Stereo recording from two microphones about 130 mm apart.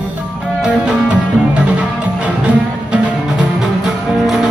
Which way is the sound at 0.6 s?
10° right (ahead or behind).